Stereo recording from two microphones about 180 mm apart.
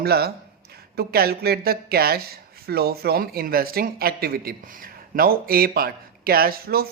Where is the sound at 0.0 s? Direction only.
60° right (ahead or behind).